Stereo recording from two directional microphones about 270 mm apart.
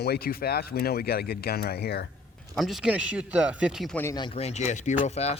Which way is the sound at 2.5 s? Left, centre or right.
Centre.